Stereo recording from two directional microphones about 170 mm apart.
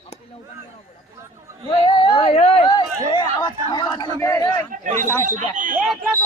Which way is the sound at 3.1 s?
25° left (ahead or behind).